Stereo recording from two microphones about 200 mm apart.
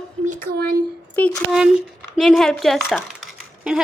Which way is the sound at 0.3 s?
45° right (ahead or behind).